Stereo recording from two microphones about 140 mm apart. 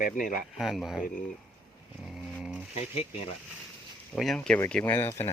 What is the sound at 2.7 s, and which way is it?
Speech, 45° left (ahead or behind).